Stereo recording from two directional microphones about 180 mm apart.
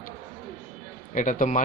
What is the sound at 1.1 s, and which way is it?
Speech, 45° left (ahead or behind).